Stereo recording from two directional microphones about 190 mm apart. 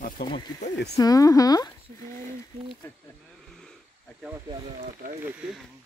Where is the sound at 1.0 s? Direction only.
20° left (ahead or behind).